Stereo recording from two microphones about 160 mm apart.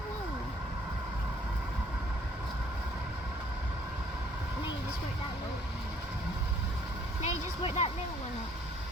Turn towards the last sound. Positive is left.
turn(degrees=40)  # may be behind; listen again after turning